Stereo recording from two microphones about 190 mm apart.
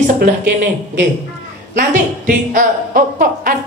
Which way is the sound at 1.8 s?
45° right (ahead or behind).